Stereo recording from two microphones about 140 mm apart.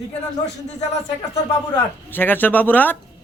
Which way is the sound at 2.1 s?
15° left (ahead or behind).